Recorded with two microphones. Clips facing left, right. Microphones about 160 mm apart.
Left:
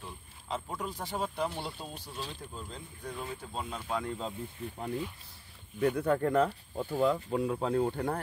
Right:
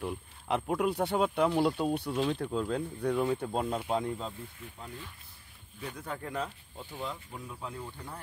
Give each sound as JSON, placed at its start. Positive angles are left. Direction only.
{"t": 0.0, "sound": "speech", "side_deg": -65}
{"t": 3.8, "sound": "speech", "side_deg": -20}
{"t": 4.6, "sound": "speech", "side_deg": 35}
{"t": 5.8, "sound": "speech", "side_deg": 60}
{"t": 7.2, "sound": "speech", "side_deg": 70}